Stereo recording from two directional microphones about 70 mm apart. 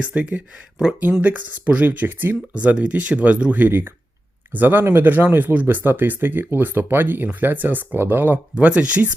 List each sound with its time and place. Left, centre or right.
0.0 s speech: centre
8.5 s speech: centre